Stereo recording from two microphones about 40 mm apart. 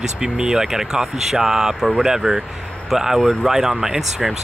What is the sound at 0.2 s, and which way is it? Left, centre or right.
Speech, centre.